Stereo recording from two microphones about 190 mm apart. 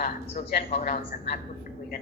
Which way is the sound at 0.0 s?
45° left (ahead or behind).